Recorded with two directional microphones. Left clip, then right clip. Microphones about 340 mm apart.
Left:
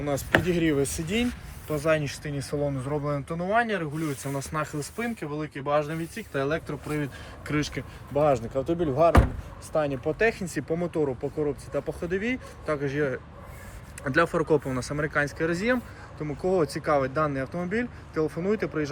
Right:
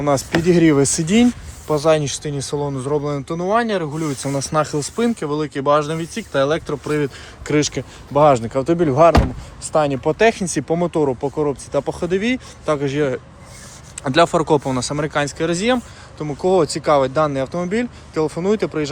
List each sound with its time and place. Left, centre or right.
0.0 s speech: centre
0.8 s speech: right
1.7 s speech: centre